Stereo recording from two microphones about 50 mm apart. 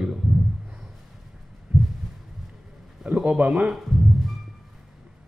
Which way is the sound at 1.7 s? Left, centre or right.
Centre.